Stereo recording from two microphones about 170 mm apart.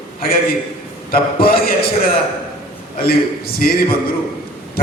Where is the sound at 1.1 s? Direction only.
60° left (ahead or behind).